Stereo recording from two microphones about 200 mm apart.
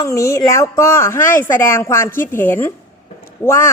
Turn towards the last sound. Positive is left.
turn(degrees=10)  # may be behind; listen again after turning